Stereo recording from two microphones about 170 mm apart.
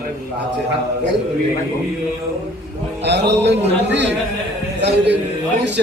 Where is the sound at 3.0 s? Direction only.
90° right.